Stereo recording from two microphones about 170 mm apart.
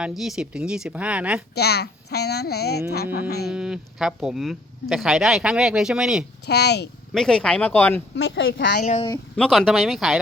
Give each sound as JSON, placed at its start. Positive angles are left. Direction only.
{"t": 0.0, "sound": "speech", "side_deg": 0}
{"t": 1.5, "sound": "a child's voice", "side_deg": 70}
{"t": 3.5, "sound": "speech", "side_deg": -5}
{"t": 6.4, "sound": "a child's voice", "side_deg": 75}
{"t": 7.1, "sound": "speech", "side_deg": 5}
{"t": 8.1, "sound": "speech", "side_deg": 90}
{"t": 8.8, "sound": "speech", "side_deg": 45}
{"t": 9.3, "sound": "speech", "side_deg": 5}